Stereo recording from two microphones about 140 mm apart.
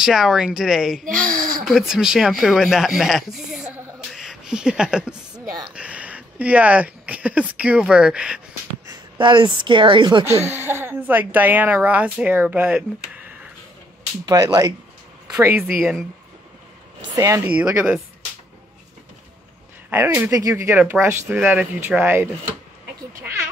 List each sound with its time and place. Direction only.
0.0 s speech: centre (ahead or behind)
8.8 s a woman's voice: 35° right (ahead or behind)
10.5 s speech: 15° right (ahead or behind)
14.2 s speech: 25° right (ahead or behind); by 16.1 s 5° right (ahead or behind)
17.1 s speech: 20° right (ahead or behind)
17.5 s speech: 10° right (ahead or behind)
19.9 s speech: 15° right (ahead or behind)
23.1 s a sound: 15° right (ahead or behind)